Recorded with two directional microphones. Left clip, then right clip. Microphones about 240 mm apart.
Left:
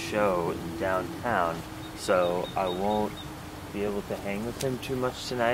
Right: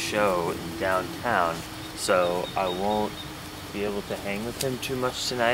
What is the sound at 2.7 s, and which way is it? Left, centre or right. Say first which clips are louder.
Speech: right 2 dB; left.